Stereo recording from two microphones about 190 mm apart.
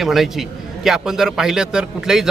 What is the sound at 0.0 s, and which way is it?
A man's voice, centre (ahead or behind).